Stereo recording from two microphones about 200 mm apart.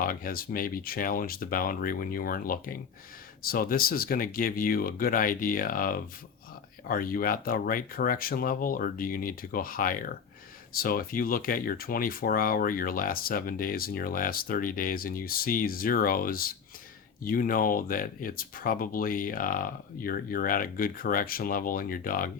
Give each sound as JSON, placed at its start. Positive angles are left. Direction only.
{"t": 0.0, "sound": "speech", "side_deg": 45}